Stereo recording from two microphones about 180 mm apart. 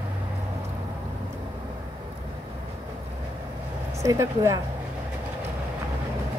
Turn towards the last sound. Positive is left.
turn(degrees=-20)  # may be behind; listen again after turning